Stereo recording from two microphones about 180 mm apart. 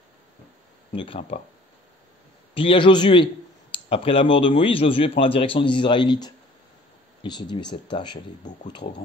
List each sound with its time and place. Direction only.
0.9 s speech: 30° left (ahead or behind)
2.5 s speech: 30° left (ahead or behind)